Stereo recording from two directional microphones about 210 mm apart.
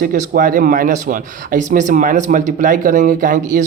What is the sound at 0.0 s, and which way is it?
Speech, 40° right (ahead or behind).